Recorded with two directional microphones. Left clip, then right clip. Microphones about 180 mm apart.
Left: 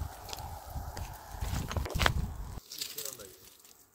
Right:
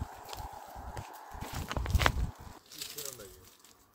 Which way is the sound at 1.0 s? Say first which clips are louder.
Right 1 dB; 10° left (ahead or behind).